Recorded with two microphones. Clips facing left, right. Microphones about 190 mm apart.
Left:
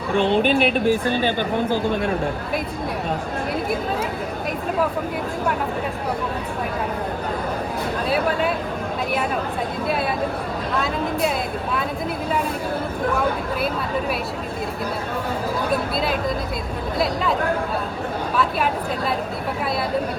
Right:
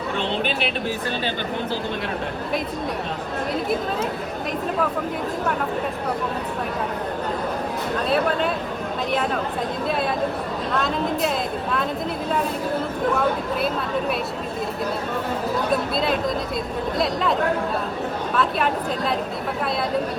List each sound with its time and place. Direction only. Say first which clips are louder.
0.2 s a woman's voice: left 9 dB; 50° left (ahead or behind)
10.8 s speech: even; 5° left (ahead or behind)
15.7 s speech: right 1 dB; centre (ahead or behind)